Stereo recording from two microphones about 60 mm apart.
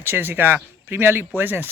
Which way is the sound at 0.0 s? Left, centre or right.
Right.